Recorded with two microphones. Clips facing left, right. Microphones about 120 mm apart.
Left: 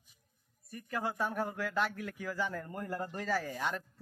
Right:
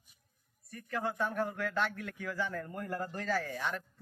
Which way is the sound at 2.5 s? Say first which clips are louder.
Right 1 dB; 25° left (ahead or behind).